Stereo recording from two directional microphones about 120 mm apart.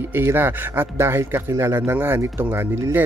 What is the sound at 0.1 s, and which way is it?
Speech, 20° right (ahead or behind).